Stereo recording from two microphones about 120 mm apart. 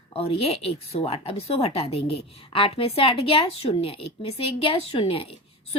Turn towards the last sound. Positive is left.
turn(degrees=50)  # may be behind; listen again after turning